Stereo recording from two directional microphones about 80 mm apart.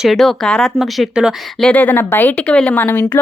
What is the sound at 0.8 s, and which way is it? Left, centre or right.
Speech, centre.